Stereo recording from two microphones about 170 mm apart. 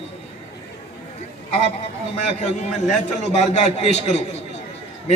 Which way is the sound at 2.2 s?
40° left (ahead or behind).